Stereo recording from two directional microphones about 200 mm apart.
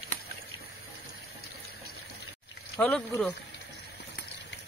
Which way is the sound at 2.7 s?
5° left (ahead or behind).